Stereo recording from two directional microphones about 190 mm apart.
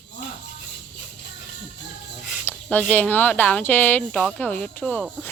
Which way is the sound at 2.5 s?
5° left (ahead or behind).